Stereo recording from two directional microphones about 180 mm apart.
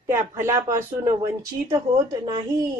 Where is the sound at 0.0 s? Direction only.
15° right (ahead or behind).